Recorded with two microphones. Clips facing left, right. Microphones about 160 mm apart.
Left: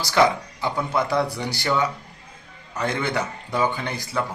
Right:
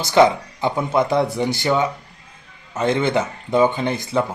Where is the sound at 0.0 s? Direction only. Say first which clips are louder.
Right 5 dB; 20° right (ahead or behind).